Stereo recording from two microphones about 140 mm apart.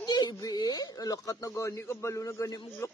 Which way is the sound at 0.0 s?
30° left (ahead or behind).